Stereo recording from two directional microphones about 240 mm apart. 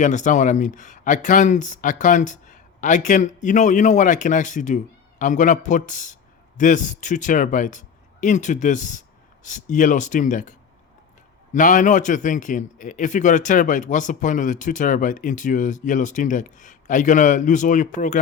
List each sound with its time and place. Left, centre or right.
0.0 s a man's voice: left
11.5 s a man's voice: left